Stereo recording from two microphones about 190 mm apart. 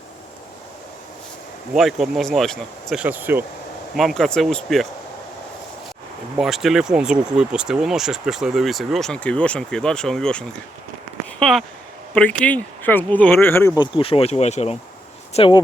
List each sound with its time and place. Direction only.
1.7 s speech: centre (ahead or behind)
3.9 s speech: centre (ahead or behind)
6.3 s speech: centre (ahead or behind)
13.7 s speech: 25° left (ahead or behind)